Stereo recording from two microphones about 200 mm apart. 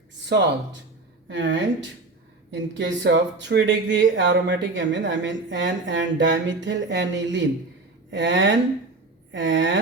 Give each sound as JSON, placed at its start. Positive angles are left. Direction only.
{"t": 0.3, "sound": "speech", "side_deg": -65}